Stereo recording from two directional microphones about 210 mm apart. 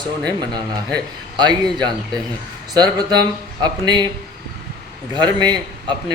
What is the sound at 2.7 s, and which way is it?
Speech, 20° right (ahead or behind).